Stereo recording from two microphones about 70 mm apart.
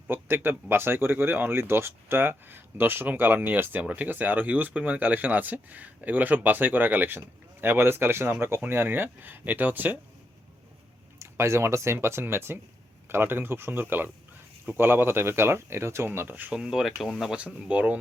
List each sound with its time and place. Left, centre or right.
0.1 s speech: right
11.2 s speech: right
16.5 s speech: centre
17.3 s speech: centre